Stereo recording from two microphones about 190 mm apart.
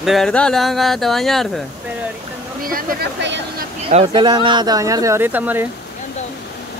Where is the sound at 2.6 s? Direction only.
50° right (ahead or behind).